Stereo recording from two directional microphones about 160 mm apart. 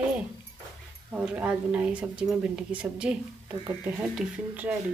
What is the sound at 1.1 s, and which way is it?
A woman's voice, 10° right (ahead or behind).